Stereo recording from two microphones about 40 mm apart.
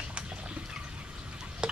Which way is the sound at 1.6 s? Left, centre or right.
Centre.